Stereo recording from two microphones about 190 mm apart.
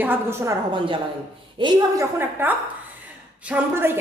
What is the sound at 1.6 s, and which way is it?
A woman's voice, 15° right (ahead or behind).